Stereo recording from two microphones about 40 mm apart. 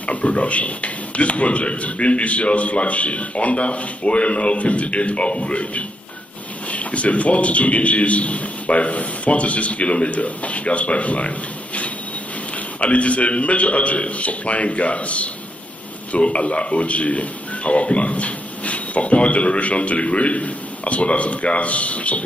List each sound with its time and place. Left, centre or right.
0.0 s a man's voice: left